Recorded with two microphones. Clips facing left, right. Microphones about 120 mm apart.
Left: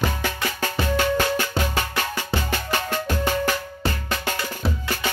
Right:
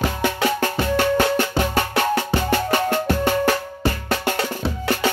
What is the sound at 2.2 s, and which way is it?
Music, 60° right (ahead or behind).